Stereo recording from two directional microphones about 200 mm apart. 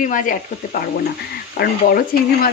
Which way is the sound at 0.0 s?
40° left (ahead or behind).